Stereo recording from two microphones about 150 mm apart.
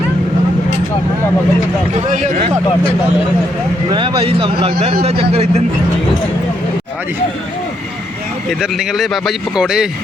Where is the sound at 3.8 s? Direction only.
35° right (ahead or behind).